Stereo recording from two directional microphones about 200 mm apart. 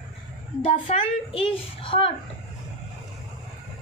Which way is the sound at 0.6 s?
30° left (ahead or behind).